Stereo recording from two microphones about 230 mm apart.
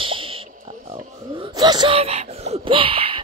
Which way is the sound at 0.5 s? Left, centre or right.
Right.